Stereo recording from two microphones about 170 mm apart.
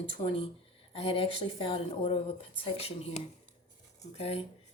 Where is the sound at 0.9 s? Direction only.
35° left (ahead or behind).